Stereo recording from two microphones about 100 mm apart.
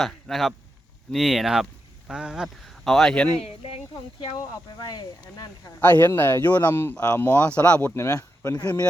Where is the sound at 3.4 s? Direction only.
85° left.